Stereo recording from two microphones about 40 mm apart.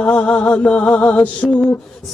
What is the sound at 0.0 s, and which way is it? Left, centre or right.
Mantra, left.